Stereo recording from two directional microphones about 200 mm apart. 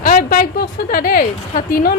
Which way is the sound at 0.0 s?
50° left (ahead or behind).